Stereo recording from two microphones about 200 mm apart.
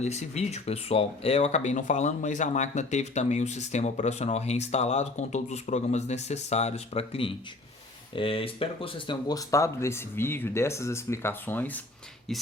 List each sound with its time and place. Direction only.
0.0 s speech: 35° left (ahead or behind); by 11.8 s 10° left (ahead or behind)